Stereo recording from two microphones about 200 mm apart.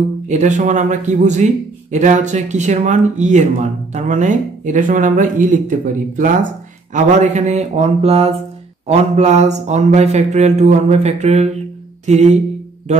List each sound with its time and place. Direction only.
0.3 s a man's voice: 35° right (ahead or behind)